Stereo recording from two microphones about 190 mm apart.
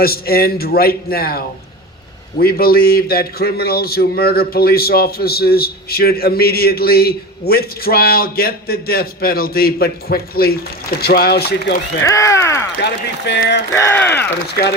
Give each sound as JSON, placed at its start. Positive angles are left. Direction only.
{"t": 0.0, "sound": "a man's voice", "side_deg": 55}
{"t": 12.0, "sound": "speech", "side_deg": 15}
{"t": 12.8, "sound": "speech", "side_deg": 65}
{"t": 13.7, "sound": "speech", "side_deg": 10}